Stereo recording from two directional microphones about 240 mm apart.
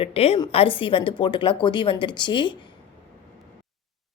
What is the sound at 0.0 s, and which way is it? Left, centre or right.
A woman's voice, left.